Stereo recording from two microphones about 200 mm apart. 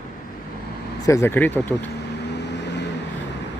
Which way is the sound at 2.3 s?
60° left (ahead or behind).